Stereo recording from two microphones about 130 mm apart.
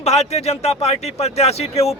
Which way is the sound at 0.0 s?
55° left (ahead or behind).